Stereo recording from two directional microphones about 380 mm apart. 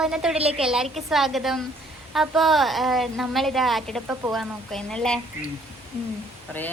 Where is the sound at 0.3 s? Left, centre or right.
Centre.